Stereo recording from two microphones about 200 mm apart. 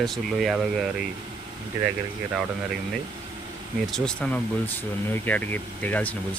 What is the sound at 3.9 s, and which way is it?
Speech, 5° left (ahead or behind).